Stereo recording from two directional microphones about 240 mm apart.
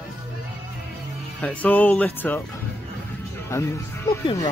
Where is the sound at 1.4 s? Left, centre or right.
Centre.